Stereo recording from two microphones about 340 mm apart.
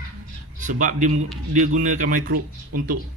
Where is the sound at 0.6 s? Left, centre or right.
Right.